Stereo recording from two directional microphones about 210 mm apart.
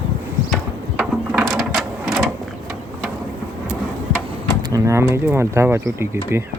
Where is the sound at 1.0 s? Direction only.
Centre (ahead or behind).